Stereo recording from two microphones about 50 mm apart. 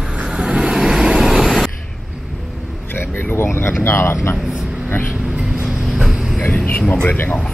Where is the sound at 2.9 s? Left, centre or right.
Left.